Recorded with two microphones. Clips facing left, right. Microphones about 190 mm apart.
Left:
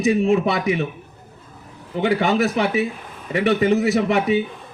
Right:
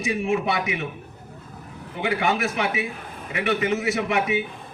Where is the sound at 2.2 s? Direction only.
25° left (ahead or behind).